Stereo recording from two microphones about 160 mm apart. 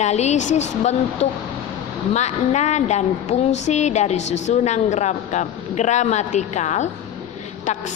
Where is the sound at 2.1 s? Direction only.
45° left (ahead or behind).